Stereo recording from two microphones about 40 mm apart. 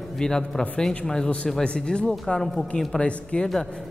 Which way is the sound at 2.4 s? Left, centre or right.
Centre.